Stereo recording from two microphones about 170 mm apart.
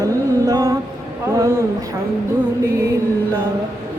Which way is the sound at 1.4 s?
15° right (ahead or behind).